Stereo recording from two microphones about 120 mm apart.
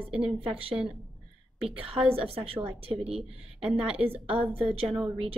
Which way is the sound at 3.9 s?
55° right (ahead or behind).